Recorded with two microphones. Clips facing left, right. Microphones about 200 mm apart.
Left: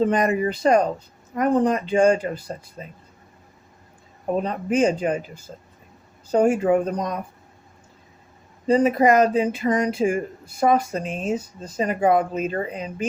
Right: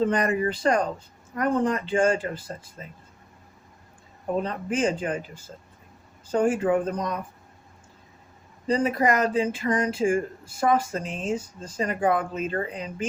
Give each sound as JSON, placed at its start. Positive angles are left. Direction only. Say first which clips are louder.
{"t": 0.0, "sound": "speech", "louder": "left 3 dB", "side_deg": 20}
{"t": 4.4, "sound": "speech", "louder": "left 8 dB", "side_deg": 20}
{"t": 6.3, "sound": "speech", "louder": "left 4 dB", "side_deg": 25}
{"t": 8.6, "sound": "speech", "louder": "left 6 dB", "side_deg": 20}